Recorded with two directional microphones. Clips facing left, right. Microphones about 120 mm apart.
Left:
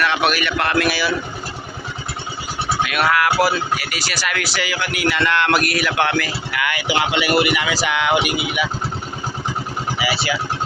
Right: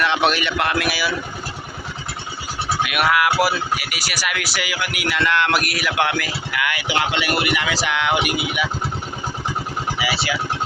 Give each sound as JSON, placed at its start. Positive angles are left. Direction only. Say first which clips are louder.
{"t": 0.0, "sound": "speech", "louder": "even", "side_deg": -25}
{"t": 2.8, "sound": "speech", "louder": "even", "side_deg": -15}
{"t": 10.0, "sound": "speech", "louder": "left 2 dB", "side_deg": 0}